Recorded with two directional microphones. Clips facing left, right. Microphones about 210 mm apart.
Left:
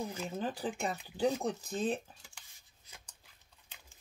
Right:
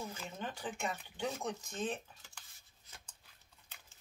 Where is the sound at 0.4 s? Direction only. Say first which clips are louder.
Left 4 dB; 35° left (ahead or behind).